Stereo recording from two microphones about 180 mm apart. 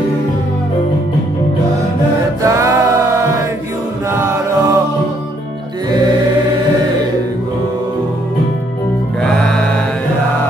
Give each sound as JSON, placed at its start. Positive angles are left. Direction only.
{"t": 2.4, "sound": "music", "side_deg": -15}
{"t": 4.1, "sound": "choir", "side_deg": -15}
{"t": 9.2, "sound": "music", "side_deg": 5}